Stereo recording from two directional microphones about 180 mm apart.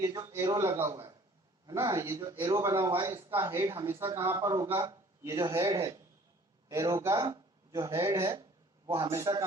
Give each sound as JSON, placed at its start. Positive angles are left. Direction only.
{"t": 0.0, "sound": "a man's voice", "side_deg": -20}